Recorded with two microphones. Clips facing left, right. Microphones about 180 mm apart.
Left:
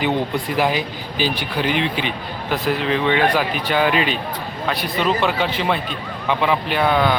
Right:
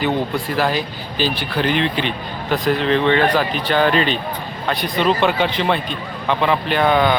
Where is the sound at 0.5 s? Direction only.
15° left (ahead or behind).